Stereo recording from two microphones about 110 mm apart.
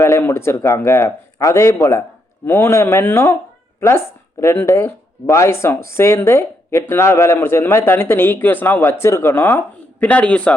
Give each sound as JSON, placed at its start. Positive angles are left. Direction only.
{"t": 0.0, "sound": "a man's voice", "side_deg": 20}